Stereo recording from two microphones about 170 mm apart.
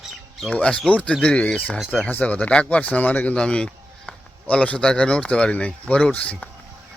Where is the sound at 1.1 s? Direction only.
5° left (ahead or behind).